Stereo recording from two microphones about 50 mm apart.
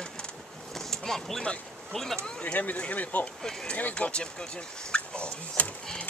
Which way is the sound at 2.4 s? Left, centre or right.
Left.